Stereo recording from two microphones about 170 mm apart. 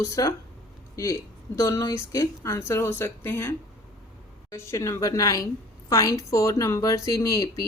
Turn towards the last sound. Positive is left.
turn(degrees=20)  # may be behind; listen again after turning